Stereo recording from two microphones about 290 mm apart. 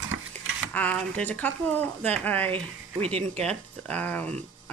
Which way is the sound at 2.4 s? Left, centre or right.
Centre.